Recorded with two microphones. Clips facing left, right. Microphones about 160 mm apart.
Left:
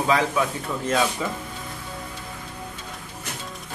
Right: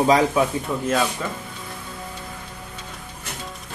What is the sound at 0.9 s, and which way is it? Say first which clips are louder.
Speech: even; centre (ahead or behind).